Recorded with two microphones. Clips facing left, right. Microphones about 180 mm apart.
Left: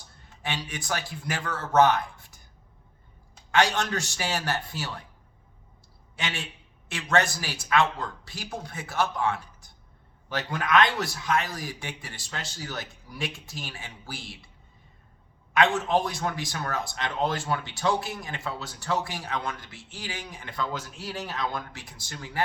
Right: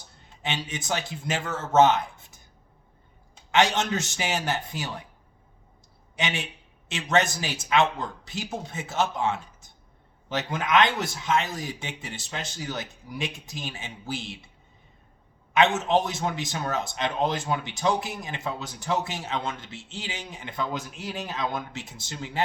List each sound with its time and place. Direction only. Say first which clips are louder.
0.4 s a man's voice: right 2 dB; 20° right (ahead or behind)
3.5 s a man's voice: right 1 dB; 20° right (ahead or behind)
6.1 s a man's voice: right 4 dB; 20° right (ahead or behind)
15.5 s a man's voice: right 2 dB; 20° right (ahead or behind)